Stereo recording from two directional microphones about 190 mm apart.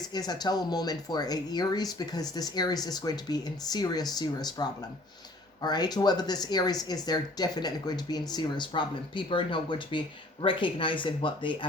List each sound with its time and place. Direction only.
0.1 s speech: 20° left (ahead or behind)